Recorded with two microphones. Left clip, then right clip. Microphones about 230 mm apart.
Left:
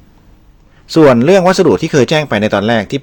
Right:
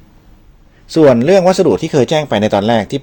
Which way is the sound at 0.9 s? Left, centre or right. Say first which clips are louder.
Left 1 dB; centre.